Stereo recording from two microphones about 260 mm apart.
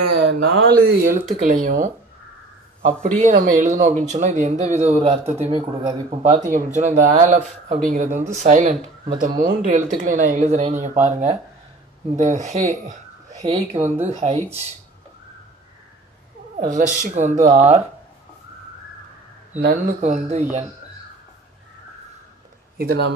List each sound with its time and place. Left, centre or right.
0.2 s speech: right
2.8 s speech: right; by 5.9 s centre
6.2 s speech: right
16.7 s speech: right
19.6 s speech: right